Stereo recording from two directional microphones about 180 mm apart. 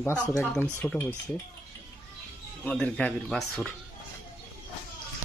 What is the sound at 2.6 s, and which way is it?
Speech, 5° left (ahead or behind).